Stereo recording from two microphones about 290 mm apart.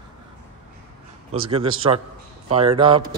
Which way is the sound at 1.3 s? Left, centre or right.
Centre.